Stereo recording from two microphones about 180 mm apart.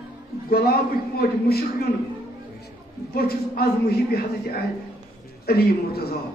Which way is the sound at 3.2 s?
60° left (ahead or behind).